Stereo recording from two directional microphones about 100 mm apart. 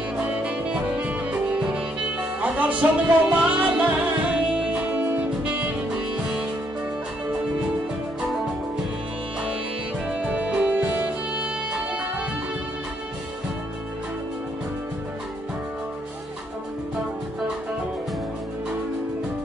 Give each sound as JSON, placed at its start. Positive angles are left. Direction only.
{"t": 0.4, "sound": "music", "side_deg": -10}
{"t": 10.0, "sound": "music", "side_deg": -10}